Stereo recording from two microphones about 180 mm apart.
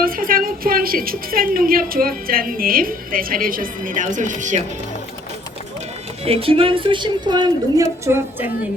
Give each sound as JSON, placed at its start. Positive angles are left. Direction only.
{"t": 0.0, "sound": "a woman's voice", "side_deg": -50}
{"t": 6.2, "sound": "a woman's voice", "side_deg": -30}